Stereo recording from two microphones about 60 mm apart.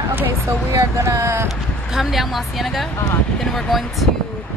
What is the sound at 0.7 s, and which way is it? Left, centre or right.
Speech, right.